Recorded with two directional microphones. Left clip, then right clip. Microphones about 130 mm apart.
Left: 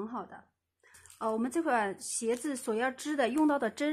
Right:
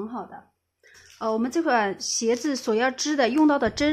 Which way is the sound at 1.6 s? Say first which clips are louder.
Right 8 dB; 30° right (ahead or behind).